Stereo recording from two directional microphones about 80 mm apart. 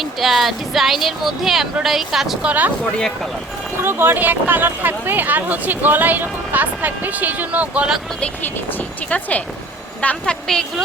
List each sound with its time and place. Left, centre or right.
0.0 s speech: centre
2.4 s speech: centre
3.8 s speech: right
9.0 s speech: centre